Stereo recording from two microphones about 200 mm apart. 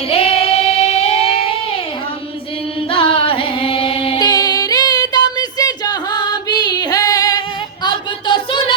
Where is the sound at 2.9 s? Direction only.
25° left (ahead or behind).